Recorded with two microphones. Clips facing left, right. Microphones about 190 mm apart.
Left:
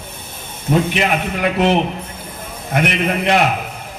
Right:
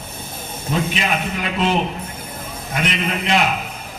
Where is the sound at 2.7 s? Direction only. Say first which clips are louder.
Left 5 dB; 60° left (ahead or behind).